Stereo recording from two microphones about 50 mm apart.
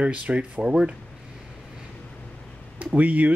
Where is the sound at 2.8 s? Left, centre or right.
Right.